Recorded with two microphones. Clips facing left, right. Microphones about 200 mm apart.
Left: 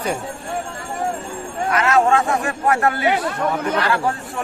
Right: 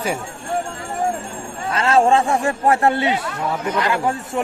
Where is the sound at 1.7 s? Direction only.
30° right (ahead or behind).